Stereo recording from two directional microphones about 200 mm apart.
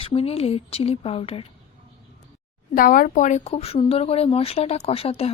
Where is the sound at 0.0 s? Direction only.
30° left (ahead or behind).